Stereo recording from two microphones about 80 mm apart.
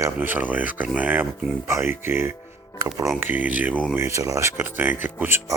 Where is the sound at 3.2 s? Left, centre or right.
Right.